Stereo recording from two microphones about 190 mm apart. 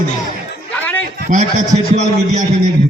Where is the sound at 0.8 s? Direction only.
10° left (ahead or behind).